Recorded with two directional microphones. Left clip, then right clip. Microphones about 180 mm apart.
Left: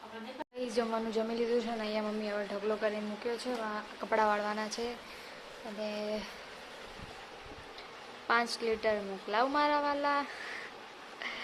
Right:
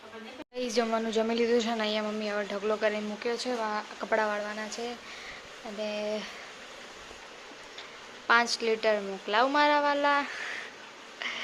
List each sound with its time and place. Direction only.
0.6 s speech: 5° right (ahead or behind)
4.1 s speech: 10° left (ahead or behind)
5.8 s a woman's voice: centre (ahead or behind)
8.3 s a woman's voice: 5° right (ahead or behind)
11.2 s bee: centre (ahead or behind)